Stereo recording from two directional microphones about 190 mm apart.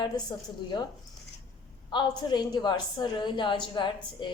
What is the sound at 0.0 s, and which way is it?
Speech, 20° left (ahead or behind).